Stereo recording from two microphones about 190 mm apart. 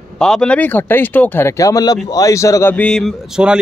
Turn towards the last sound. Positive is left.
turn(degrees=-5)  # may be behind; listen again after turning